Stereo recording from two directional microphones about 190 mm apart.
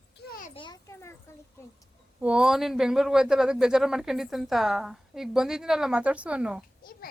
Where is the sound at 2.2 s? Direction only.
5° right (ahead or behind).